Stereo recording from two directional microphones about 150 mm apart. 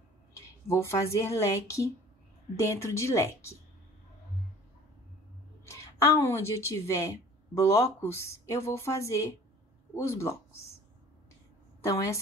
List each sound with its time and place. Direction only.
0.7 s a woman's voice: 20° left (ahead or behind)
5.7 s a woman's voice: 20° left (ahead or behind)
11.8 s a woman's voice: 20° left (ahead or behind)